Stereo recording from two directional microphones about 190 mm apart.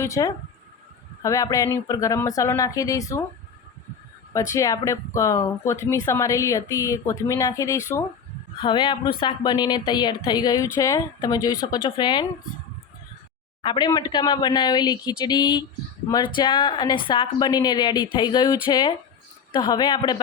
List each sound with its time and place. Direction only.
0.0 s speech: 15° left (ahead or behind)
4.4 s a woman's voice: 15° left (ahead or behind)
13.6 s a woman's voice: 25° left (ahead or behind)